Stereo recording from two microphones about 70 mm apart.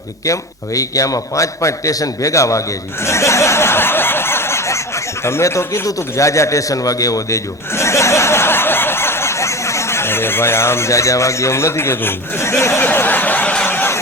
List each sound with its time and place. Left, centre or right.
0.3 s a man's voice: left
12.8 s a sound: left
13.7 s chicken: left